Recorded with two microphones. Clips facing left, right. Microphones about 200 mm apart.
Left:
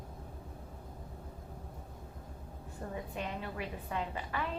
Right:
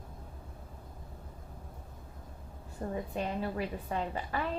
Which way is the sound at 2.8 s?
30° right (ahead or behind).